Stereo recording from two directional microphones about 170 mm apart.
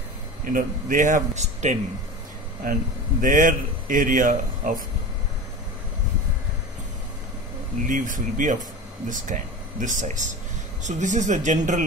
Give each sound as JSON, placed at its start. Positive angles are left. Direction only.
{"t": 0.5, "sound": "speech", "side_deg": -55}
{"t": 2.6, "sound": "speech", "side_deg": -55}
{"t": 7.8, "sound": "speech", "side_deg": -50}